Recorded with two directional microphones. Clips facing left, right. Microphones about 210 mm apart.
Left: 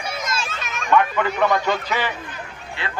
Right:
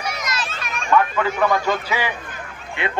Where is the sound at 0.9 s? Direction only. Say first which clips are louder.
Even; 5° right (ahead or behind).